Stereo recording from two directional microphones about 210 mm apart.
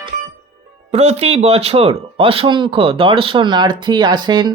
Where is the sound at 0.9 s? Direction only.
30° right (ahead or behind).